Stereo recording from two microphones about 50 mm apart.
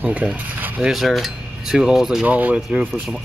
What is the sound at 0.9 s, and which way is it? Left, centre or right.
Cutlery, centre.